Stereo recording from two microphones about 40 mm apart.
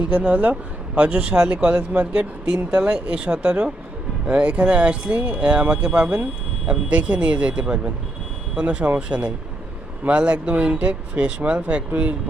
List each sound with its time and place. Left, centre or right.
0.1 s speech: right